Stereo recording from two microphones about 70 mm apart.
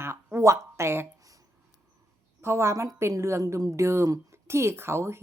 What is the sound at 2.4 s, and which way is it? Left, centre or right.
A woman's voice, right.